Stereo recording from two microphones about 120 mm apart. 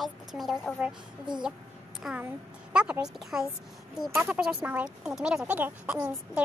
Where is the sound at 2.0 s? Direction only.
10° right (ahead or behind).